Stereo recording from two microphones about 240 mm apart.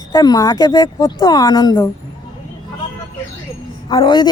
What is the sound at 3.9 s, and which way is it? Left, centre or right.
Speech, centre.